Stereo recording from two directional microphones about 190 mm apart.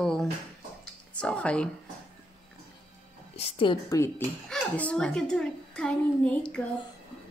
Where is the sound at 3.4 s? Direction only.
30° left (ahead or behind); by 6.6 s 5° left (ahead or behind).